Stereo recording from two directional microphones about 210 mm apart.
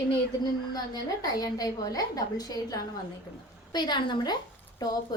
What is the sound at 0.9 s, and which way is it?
A woman's voice, 20° left (ahead or behind).